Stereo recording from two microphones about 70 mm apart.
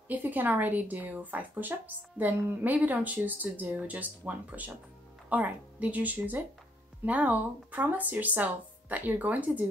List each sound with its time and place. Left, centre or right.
0.1 s a woman's voice: right